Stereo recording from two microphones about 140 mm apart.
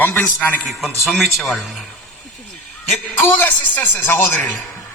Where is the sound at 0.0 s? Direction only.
15° left (ahead or behind).